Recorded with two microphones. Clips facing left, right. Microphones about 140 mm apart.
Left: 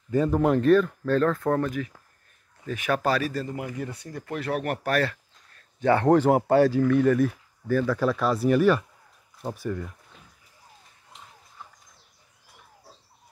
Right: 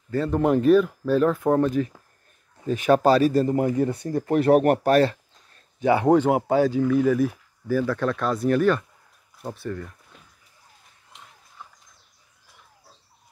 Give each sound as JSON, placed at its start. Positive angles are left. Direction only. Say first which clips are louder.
{"t": 0.1, "sound": "speech", "louder": "left 1 dB", "side_deg": 10}
{"t": 0.4, "sound": "speech", "louder": "right 3 dB", "side_deg": -5}
{"t": 1.7, "sound": "speech", "louder": "right 7 dB", "side_deg": -30}
{"t": 4.0, "sound": "speech", "louder": "right 11 dB", "side_deg": -45}
{"t": 4.8, "sound": "a sound", "louder": "right 7 dB", "side_deg": -25}
{"t": 5.8, "sound": "speech", "louder": "right 1 dB", "side_deg": -10}
{"t": 6.1, "sound": "speech", "louder": "even", "side_deg": 0}